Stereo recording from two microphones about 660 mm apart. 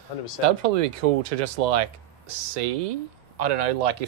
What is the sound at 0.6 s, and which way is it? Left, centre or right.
Speech, right.